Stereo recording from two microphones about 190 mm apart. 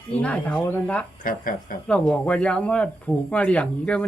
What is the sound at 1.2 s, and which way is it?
Speech, 45° left (ahead or behind).